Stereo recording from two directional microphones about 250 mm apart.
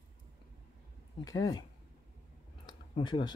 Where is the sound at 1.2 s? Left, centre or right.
Centre.